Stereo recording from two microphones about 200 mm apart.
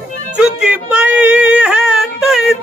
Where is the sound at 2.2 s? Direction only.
Centre (ahead or behind).